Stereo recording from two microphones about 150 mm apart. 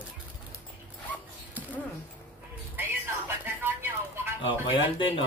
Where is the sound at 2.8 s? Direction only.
15° right (ahead or behind).